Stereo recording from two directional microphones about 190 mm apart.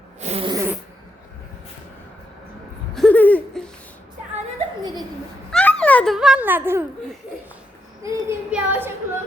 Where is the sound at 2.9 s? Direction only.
5° left (ahead or behind).